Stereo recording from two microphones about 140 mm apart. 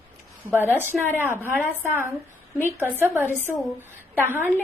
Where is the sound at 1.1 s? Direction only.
15° right (ahead or behind).